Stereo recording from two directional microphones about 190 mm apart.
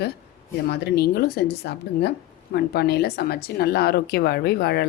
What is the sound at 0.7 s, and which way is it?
Speech, 60° left (ahead or behind).